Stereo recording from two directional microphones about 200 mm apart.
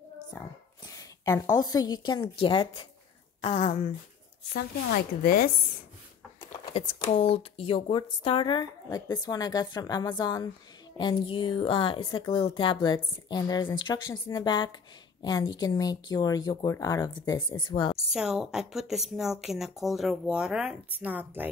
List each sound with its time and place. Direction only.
0.8 s a woman's voice: 15° left (ahead or behind)
3.3 s speech: 30° left (ahead or behind)
5.2 s speech: 45° left (ahead or behind)
6.6 s speech: 20° left (ahead or behind)
18.1 s speech: centre (ahead or behind)